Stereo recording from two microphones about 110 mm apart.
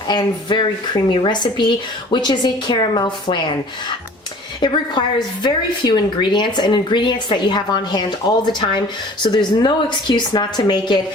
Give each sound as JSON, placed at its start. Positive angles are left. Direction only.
{"t": 0.1, "sound": "a woman's voice", "side_deg": 45}
{"t": 4.6, "sound": "a woman's voice", "side_deg": 45}